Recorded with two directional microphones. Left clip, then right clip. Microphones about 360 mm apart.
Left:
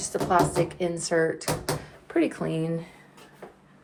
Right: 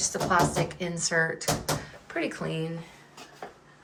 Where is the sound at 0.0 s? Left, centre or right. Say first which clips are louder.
Left 1 dB; centre.